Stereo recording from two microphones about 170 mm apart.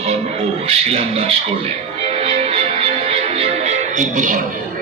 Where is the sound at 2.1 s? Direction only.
40° right (ahead or behind).